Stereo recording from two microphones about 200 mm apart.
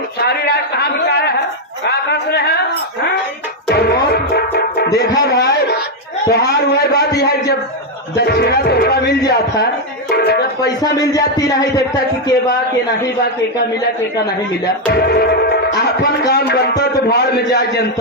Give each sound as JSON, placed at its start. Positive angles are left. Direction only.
{"t": 0.3, "sound": "a man's voice", "side_deg": 50}
{"t": 1.9, "sound": "a sound", "side_deg": 55}
{"t": 3.7, "sound": "music", "side_deg": 55}
{"t": 6.2, "sound": "a sound", "side_deg": 50}
{"t": 8.2, "sound": "music", "side_deg": 55}
{"t": 10.8, "sound": "a man's voice", "side_deg": 20}
{"t": 14.9, "sound": "speech", "side_deg": 50}